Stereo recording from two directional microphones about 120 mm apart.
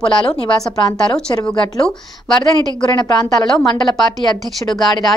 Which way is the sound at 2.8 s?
35° left (ahead or behind).